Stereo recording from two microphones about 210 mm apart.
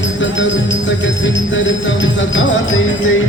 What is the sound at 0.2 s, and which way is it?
Jingle bell, 60° left (ahead or behind).